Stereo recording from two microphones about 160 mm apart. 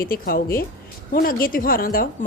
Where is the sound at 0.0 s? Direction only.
65° left (ahead or behind).